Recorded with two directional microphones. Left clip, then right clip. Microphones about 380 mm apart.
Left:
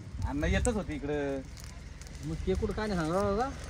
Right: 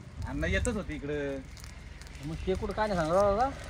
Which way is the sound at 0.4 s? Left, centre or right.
Centre.